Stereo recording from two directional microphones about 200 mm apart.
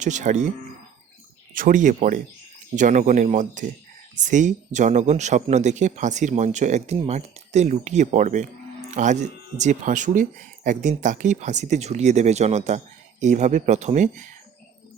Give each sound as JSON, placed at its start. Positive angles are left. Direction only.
{"t": 0.0, "sound": "speech", "side_deg": -40}
{"t": 1.5, "sound": "speech", "side_deg": -40}